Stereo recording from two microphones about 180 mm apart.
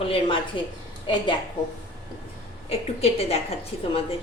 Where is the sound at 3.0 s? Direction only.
35° left (ahead or behind).